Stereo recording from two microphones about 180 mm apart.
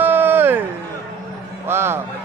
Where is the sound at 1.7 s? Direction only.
15° right (ahead or behind).